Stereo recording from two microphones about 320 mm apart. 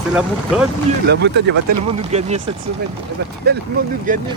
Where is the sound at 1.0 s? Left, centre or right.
Right.